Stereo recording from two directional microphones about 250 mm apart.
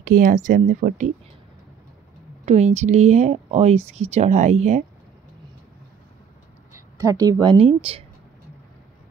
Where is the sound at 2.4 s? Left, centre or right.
Right.